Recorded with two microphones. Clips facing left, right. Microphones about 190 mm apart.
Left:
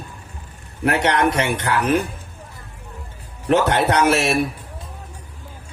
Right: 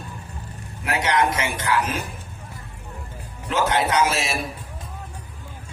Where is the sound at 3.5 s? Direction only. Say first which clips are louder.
Left 4 dB; 65° left (ahead or behind).